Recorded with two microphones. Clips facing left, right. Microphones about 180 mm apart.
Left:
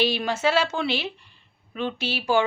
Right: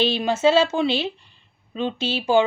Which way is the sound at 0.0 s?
20° right (ahead or behind).